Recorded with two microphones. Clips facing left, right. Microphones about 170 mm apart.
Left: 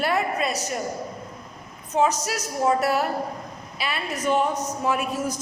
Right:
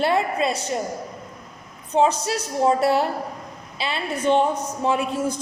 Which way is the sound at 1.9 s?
30° right (ahead or behind).